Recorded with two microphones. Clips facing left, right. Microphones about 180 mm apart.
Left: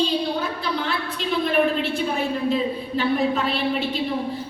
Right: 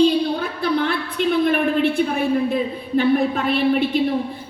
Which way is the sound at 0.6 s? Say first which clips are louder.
Right 5 dB; 55° right (ahead or behind).